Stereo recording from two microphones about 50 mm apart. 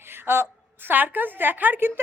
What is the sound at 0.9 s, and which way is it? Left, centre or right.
A woman's voice, right.